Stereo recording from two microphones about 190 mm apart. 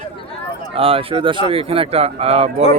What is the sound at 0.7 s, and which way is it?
Speech, 30° right (ahead or behind).